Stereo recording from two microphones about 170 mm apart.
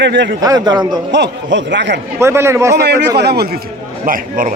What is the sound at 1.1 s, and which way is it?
Speech, 90° right.